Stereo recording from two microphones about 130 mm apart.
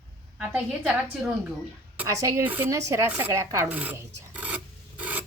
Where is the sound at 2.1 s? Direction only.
25° right (ahead or behind).